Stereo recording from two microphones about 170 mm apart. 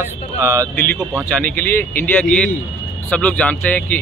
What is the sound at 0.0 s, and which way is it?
Speech, 15° right (ahead or behind).